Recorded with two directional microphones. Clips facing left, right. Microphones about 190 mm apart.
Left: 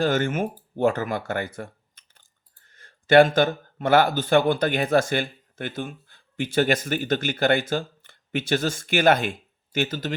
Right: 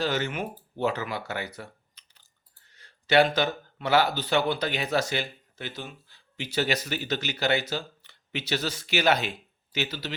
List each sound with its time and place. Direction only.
0.0 s speech: 50° left (ahead or behind)